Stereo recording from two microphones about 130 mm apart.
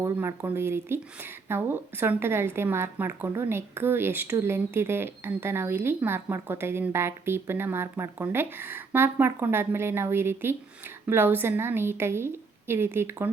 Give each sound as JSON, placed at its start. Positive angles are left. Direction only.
{"t": 0.0, "sound": "speech", "side_deg": -20}